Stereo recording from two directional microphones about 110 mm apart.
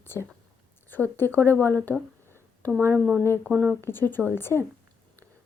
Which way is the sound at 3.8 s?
20° left (ahead or behind).